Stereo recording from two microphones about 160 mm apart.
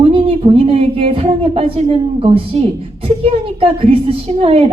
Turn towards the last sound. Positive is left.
turn(degrees=-35)  # may be behind; listen again after turning